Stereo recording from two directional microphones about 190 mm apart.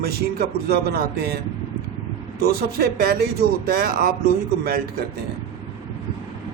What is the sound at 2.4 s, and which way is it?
A man's voice, 55° right (ahead or behind).